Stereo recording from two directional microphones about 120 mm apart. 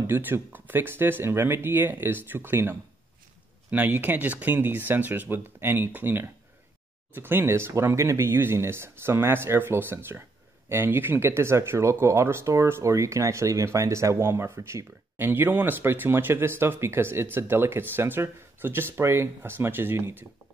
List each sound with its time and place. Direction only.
0.0 s speech: 15° right (ahead or behind)